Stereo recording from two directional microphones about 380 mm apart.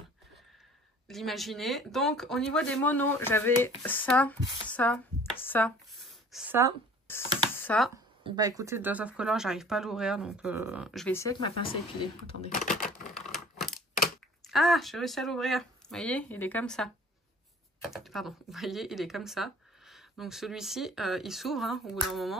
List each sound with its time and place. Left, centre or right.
1.0 s speech: centre
7.1 s a sound: centre
8.2 s speech: centre
13.2 s computer keyboard: centre
14.4 s speech: centre